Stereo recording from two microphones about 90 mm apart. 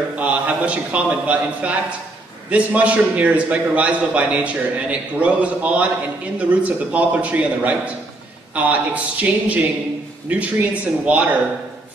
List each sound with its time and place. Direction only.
0.2 s a man's voice: 15° right (ahead or behind)